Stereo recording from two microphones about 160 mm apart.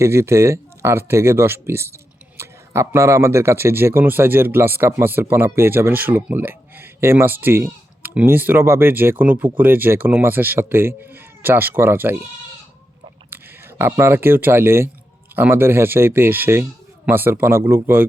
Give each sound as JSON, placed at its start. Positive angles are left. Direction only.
{"t": 0.0, "sound": "speech", "side_deg": -15}
{"t": 13.3, "sound": "speech", "side_deg": -15}